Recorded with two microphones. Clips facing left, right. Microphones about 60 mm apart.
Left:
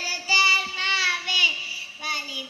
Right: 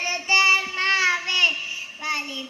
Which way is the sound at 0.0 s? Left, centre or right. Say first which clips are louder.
Right 1 dB; right.